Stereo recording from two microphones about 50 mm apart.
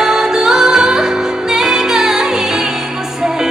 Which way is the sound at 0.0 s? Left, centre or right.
Centre.